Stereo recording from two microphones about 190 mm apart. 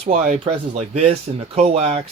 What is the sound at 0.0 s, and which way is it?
Speech, 40° right (ahead or behind).